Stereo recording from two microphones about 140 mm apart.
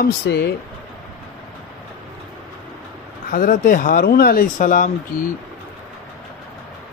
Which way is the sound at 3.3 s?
85° left.